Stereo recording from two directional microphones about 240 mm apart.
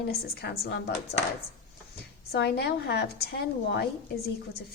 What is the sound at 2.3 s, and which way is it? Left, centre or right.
A woman's voice, left.